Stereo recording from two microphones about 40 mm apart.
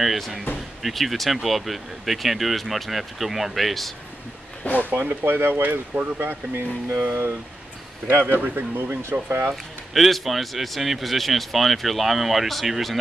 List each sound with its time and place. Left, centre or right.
0.0 s a man's voice: centre
4.6 s speech: left
5.2 s speech: right
5.6 s speech: right
6.2 s speech: right
8.1 s speech: right
9.5 s a man's voice: centre